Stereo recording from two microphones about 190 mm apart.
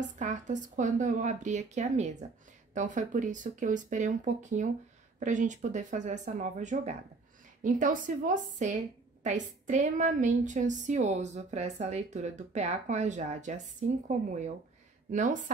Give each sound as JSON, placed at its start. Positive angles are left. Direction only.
{"t": 0.2, "sound": "a woman's voice", "side_deg": -40}